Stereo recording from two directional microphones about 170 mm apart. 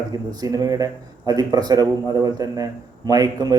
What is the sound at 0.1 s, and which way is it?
Speech, 20° right (ahead or behind).